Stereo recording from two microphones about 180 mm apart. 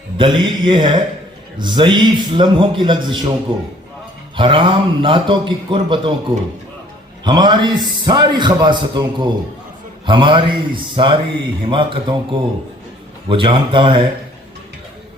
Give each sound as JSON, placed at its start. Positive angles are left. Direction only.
{"t": 0.2, "sound": "a man's voice", "side_deg": -25}
{"t": 4.4, "sound": "a man's voice", "side_deg": -30}
{"t": 7.3, "sound": "a man's voice", "side_deg": -25}